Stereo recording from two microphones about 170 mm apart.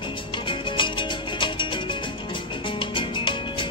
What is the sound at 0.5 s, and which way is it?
Music, 30° left (ahead or behind).